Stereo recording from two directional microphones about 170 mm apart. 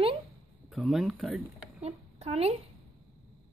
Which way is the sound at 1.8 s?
35° right (ahead or behind).